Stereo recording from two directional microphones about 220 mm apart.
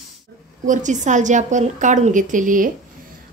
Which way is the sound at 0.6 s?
35° right (ahead or behind).